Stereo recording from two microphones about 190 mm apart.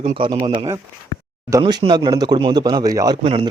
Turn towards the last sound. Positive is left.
turn(degrees=-30)  # may be behind; listen again after turning